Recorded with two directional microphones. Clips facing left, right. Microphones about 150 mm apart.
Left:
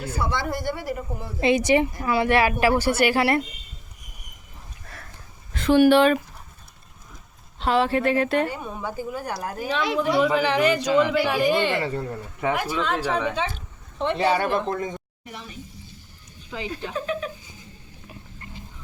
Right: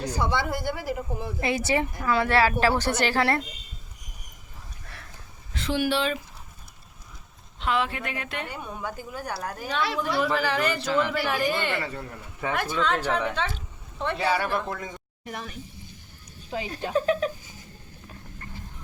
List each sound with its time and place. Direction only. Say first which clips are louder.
0.0 s speech: right 1 dB; 5° left (ahead or behind)
0.3 s speech: left 1 dB; 5° right (ahead or behind)
1.4 s a woman's voice: left 7 dB; 20° left (ahead or behind)
5.5 s speech: left 10 dB; 55° left (ahead or behind)
7.6 s speech: left 6 dB; 35° left (ahead or behind)
8.5 s speech: left 3 dB; centre (ahead or behind)
11.8 s a woman's voice: left 6 dB; 25° left (ahead or behind)
12.5 s speech: left 1 dB; 10° left (ahead or behind)
14.0 s a woman's voice: left 4 dB; 20° left (ahead or behind)
15.3 s speech: right 3 dB; 55° right (ahead or behind)
16.5 s speech: right 3 dB; 45° right (ahead or behind)